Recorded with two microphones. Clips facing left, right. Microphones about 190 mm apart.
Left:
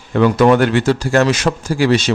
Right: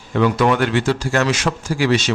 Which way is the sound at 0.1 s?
45° left (ahead or behind).